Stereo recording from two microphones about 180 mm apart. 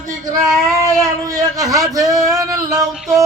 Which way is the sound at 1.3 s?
20° right (ahead or behind).